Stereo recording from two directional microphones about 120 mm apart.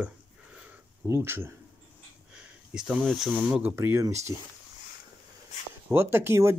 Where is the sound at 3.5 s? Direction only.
10° right (ahead or behind).